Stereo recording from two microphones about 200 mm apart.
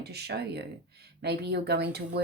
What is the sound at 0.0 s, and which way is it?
Speech, 55° right (ahead or behind).